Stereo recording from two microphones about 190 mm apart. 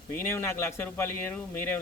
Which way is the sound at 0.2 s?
15° left (ahead or behind).